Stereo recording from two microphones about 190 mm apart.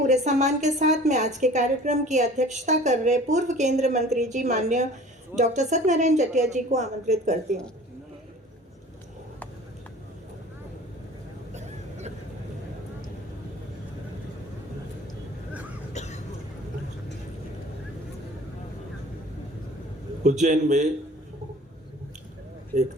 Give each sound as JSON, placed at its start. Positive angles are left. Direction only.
{"t": 0.1, "sound": "a woman's voice", "side_deg": -40}
{"t": 11.5, "sound": "a sound", "side_deg": -35}
{"t": 15.9, "sound": "cough", "side_deg": 35}
{"t": 20.2, "sound": "a woman's voice", "side_deg": -40}
{"t": 22.7, "sound": "a woman's voice", "side_deg": -40}